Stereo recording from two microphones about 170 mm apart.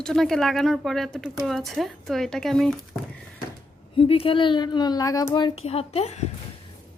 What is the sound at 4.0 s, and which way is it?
A child's voice, 35° left (ahead or behind).